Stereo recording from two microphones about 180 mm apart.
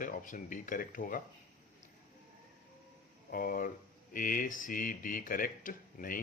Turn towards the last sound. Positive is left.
turn(degrees=50)  # may be behind; listen again after turning